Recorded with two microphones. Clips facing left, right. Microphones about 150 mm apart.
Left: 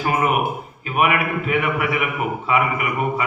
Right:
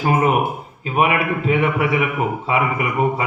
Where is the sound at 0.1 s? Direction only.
30° right (ahead or behind).